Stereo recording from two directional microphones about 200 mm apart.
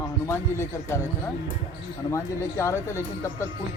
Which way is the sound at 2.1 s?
15° left (ahead or behind).